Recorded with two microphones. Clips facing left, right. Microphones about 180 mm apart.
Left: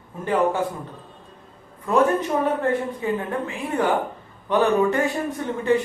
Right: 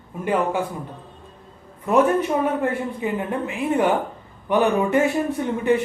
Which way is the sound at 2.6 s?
15° right (ahead or behind).